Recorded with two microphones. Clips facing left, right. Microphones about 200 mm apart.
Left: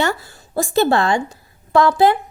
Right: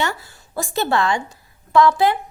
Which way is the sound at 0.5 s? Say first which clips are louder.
Left 5 dB; 30° left (ahead or behind).